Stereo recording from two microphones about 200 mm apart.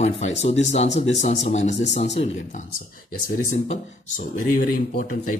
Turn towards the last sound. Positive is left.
turn(degrees=45)  # may be behind; listen again after turning